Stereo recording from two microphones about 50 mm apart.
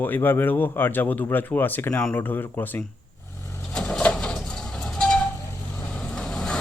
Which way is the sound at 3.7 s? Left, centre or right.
Centre.